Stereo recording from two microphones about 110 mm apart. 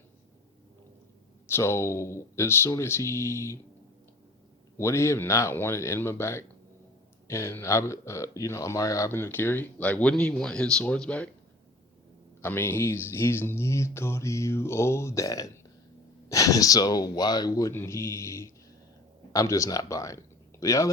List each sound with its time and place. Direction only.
1.5 s speech: 25° left (ahead or behind)
4.8 s speech: 25° left (ahead or behind)
12.4 s speech: 20° left (ahead or behind)